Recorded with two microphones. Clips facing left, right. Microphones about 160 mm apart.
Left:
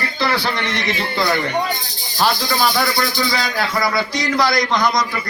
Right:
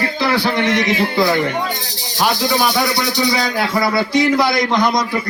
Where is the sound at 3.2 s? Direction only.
15° right (ahead or behind).